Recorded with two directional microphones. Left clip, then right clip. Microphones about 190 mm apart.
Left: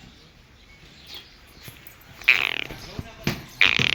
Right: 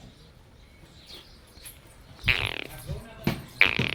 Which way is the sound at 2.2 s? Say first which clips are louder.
Left 7 dB; 15° right (ahead or behind).